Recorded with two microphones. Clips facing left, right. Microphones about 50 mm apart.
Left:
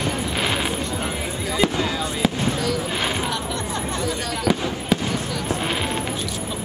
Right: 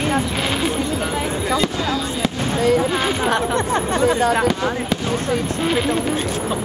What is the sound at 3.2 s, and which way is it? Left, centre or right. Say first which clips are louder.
Hubbub: right 7 dB; right.